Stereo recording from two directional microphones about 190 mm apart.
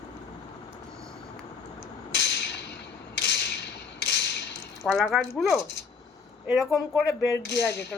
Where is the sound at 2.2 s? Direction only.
65° left (ahead or behind).